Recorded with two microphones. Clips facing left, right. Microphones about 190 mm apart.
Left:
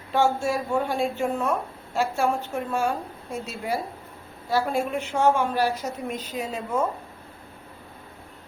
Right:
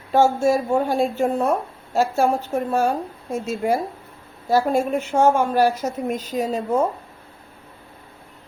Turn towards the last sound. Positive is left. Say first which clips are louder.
# right 6 dB
turn(degrees=-35)  # may be behind; listen again after turning